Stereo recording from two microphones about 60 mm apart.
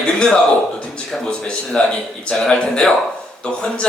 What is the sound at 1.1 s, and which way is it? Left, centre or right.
Speech, centre.